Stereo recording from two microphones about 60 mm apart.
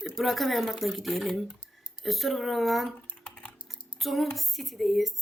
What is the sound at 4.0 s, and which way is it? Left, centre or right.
Speech, centre.